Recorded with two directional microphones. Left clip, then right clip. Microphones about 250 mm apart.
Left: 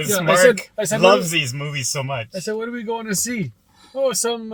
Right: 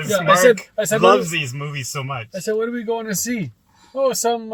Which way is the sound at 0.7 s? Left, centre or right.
Centre.